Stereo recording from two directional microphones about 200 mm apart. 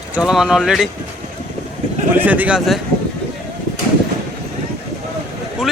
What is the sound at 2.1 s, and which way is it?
Speech, 10° right (ahead or behind).